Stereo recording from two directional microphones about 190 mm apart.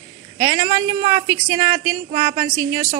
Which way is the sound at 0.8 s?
15° right (ahead or behind).